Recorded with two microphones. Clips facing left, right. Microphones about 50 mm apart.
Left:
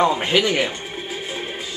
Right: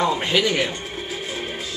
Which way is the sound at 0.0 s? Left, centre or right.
Left.